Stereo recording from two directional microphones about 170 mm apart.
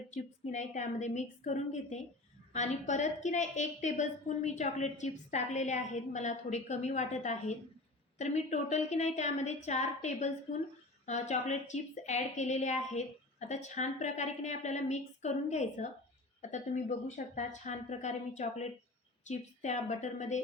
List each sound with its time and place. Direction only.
0.1 s a woman's voice: 45° left (ahead or behind)
17.3 s a woman's voice: 45° left (ahead or behind)